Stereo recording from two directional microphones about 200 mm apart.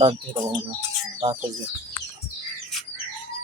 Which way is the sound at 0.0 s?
20° right (ahead or behind).